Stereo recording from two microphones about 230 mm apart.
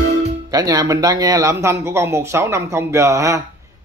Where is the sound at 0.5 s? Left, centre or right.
Centre.